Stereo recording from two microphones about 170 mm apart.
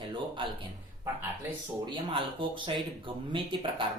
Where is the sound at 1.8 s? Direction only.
30° right (ahead or behind).